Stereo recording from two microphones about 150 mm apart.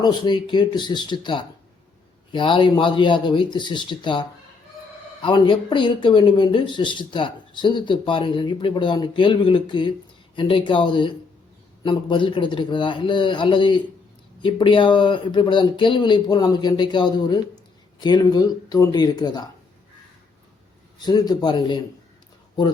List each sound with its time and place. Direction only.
0.0 s speech: 30° left (ahead or behind)
21.0 s speech: 25° left (ahead or behind)